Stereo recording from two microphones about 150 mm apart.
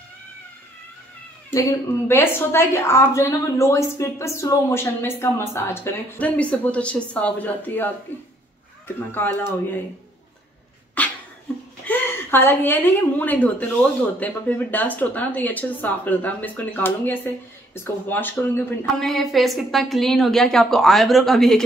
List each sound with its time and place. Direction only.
1.5 s a woman's voice: 20° left (ahead or behind)
11.0 s a sound: 10° left (ahead or behind)
11.8 s a woman's voice: 10° left (ahead or behind)
18.9 s a woman's voice: centre (ahead or behind)